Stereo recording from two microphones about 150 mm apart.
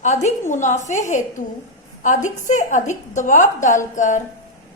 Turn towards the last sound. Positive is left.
turn(degrees=55)  # may be behind; listen again after turning